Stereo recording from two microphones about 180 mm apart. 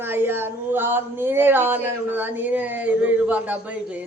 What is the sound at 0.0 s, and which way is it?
Speech, 10° right (ahead or behind).